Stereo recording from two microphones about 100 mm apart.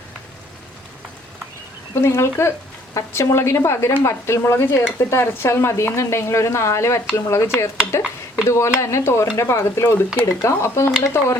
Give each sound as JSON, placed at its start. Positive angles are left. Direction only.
{"t": 2.0, "sound": "speech", "side_deg": 25}